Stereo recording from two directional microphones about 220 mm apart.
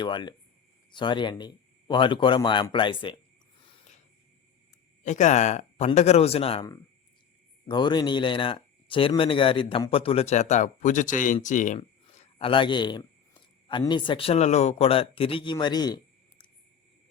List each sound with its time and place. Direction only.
0.0 s speech: 20° left (ahead or behind)
5.0 s speech: 35° left (ahead or behind)